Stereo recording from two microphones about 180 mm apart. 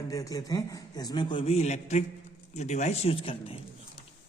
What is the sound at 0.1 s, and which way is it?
A man's voice, 20° left (ahead or behind).